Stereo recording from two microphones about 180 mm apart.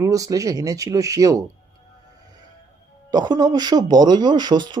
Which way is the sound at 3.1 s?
20° right (ahead or behind).